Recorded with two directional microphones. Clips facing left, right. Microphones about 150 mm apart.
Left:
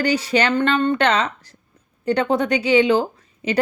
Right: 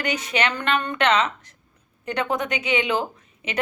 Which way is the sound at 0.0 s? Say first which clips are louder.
Left 6 dB; 35° left (ahead or behind).